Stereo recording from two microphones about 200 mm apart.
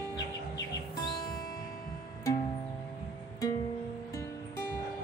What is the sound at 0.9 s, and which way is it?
Music, 20° left (ahead or behind).